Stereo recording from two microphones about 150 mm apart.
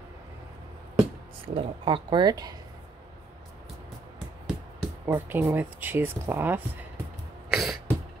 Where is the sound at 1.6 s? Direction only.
35° right (ahead or behind).